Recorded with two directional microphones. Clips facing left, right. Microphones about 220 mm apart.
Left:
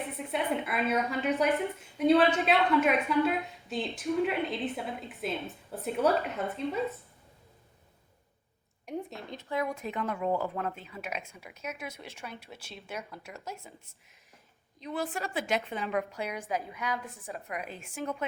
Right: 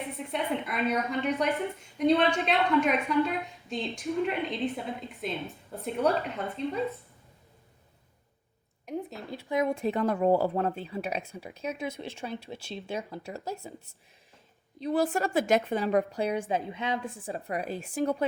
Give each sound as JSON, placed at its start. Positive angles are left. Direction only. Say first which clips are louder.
{"t": 0.3, "sound": "a woman's voice", "louder": "left 1 dB", "side_deg": 5}
{"t": 8.9, "sound": "speech", "louder": "right 2 dB", "side_deg": 0}
{"t": 14.8, "sound": "speech", "louder": "right 8 dB", "side_deg": -35}